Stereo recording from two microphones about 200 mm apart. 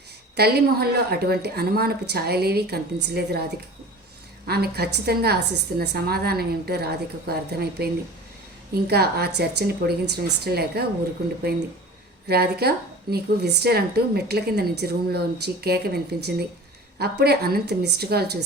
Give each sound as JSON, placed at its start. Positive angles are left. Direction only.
{"t": 0.3, "sound": "a woman's voice", "side_deg": -50}
{"t": 4.4, "sound": "a woman's voice", "side_deg": -50}
{"t": 12.3, "sound": "a woman's voice", "side_deg": -50}